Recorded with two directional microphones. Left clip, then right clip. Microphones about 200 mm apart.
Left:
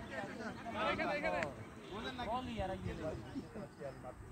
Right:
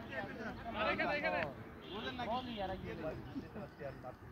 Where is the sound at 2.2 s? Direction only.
35° right (ahead or behind).